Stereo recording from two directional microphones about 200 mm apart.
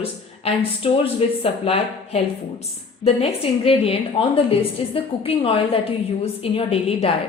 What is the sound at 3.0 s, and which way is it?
Speech, 30° left (ahead or behind).